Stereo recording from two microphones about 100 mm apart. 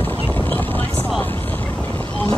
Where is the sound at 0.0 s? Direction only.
20° left (ahead or behind).